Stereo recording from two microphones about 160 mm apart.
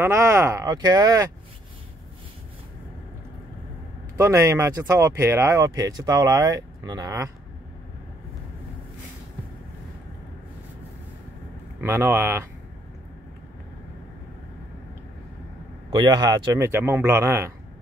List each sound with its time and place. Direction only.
0.0 s speech: 15° right (ahead or behind)
4.2 s speech: 20° right (ahead or behind)
11.8 s speech: 15° right (ahead or behind)
15.9 s speech: 25° right (ahead or behind)